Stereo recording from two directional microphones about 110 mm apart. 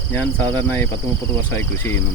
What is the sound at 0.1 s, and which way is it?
Speech, 15° left (ahead or behind).